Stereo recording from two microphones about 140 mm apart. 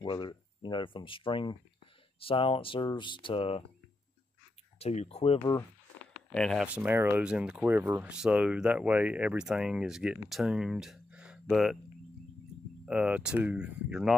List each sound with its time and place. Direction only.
0.0 s speech: 35° left (ahead or behind)
4.7 s speech: 45° left (ahead or behind)
5.4 s speech: 20° left (ahead or behind)
6.3 s speech: 5° left (ahead or behind)
6.6 s speech: 10° right (ahead or behind)
12.8 s speech: 10° right (ahead or behind)